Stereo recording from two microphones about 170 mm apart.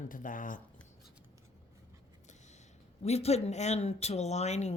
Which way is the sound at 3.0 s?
35° left (ahead or behind).